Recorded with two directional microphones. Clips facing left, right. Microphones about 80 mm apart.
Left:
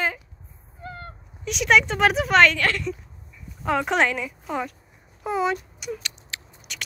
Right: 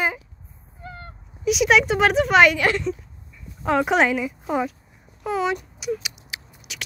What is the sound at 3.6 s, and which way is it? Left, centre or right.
Speech, centre.